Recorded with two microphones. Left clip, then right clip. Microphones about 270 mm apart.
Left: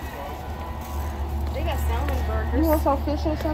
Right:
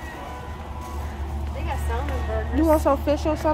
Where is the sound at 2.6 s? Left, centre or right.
Centre.